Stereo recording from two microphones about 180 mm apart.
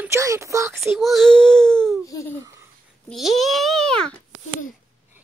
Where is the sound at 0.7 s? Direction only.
Centre (ahead or behind).